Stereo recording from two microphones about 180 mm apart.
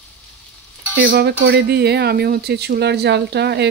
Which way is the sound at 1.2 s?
65° right (ahead or behind).